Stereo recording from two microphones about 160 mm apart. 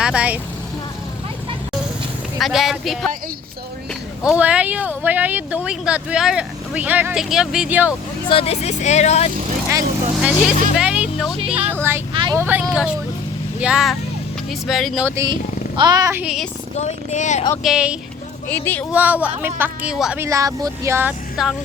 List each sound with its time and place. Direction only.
0.0 s speech: 5° right (ahead or behind)
2.4 s speech: centre (ahead or behind)
4.2 s speech: 5° right (ahead or behind)
8.3 s speech: 40° left (ahead or behind)
10.2 s speech: 5° right (ahead or behind)
12.1 s vehicle: 30° right (ahead or behind)
12.4 s speech: 10° right (ahead or behind)
15.0 s speech: 20° right (ahead or behind)
16.1 s speech: 5° right (ahead or behind)
16.7 s speech: 45° left (ahead or behind)
17.6 s speech: 5° right (ahead or behind)
18.4 s speech: 10° left (ahead or behind)
18.9 s speech: 10° right (ahead or behind)
20.1 s speech: 20° right (ahead or behind)